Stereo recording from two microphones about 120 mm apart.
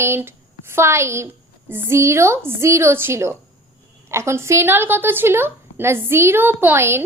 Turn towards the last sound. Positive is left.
turn(degrees=-20)  # may be behind; listen again after turning